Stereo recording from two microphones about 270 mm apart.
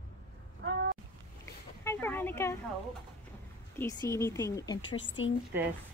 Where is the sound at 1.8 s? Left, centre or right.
Centre.